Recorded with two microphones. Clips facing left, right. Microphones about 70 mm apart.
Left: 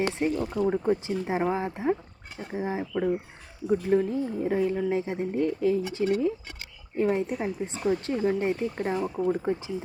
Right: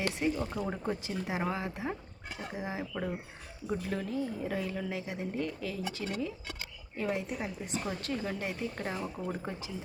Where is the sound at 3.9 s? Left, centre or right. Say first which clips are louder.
Left 12 dB; left.